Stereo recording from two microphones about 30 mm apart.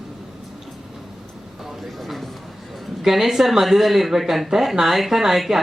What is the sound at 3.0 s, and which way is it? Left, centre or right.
A woman's voice, centre.